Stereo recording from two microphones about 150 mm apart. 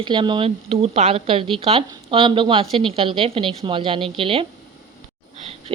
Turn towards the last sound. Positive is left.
turn(degrees=-35)  # may be behind; listen again after turning